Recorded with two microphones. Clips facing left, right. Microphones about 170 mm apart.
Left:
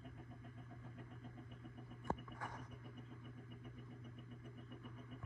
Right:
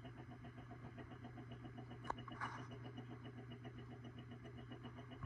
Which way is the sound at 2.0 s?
25° left (ahead or behind).